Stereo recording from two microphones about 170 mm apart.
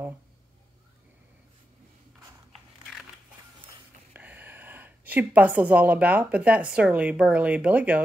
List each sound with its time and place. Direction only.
4.1 s a woman's voice: 10° right (ahead or behind)